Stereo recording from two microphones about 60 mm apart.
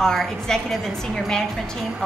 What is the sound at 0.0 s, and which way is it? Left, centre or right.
A woman's voice, centre.